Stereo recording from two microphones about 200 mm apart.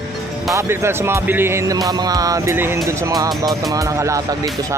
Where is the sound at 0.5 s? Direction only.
15° right (ahead or behind).